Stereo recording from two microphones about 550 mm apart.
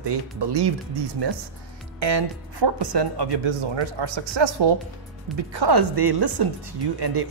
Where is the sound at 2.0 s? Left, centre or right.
Right.